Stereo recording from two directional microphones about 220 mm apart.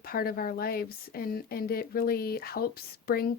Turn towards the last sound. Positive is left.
turn(degrees=45)  # may be behind; listen again after turning